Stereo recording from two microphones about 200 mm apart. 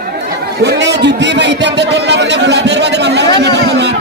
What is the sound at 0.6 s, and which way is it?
A man's voice, 60° right (ahead or behind).